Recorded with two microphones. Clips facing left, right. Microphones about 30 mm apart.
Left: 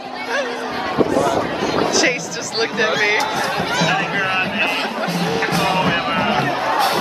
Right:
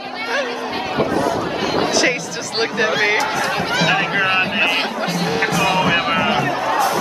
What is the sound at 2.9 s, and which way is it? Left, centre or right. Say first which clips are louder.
Speech: even; centre.